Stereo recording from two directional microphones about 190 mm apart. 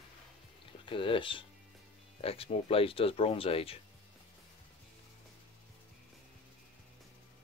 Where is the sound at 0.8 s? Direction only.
25° left (ahead or behind).